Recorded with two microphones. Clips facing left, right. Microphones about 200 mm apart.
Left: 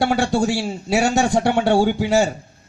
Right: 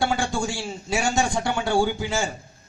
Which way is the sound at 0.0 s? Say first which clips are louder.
Left 6 dB; 70° left (ahead or behind).